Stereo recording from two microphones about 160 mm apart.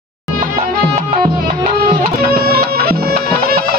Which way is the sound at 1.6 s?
65° right (ahead or behind).